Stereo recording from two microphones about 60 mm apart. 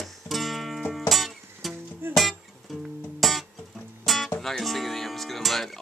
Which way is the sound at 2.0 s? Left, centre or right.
Right.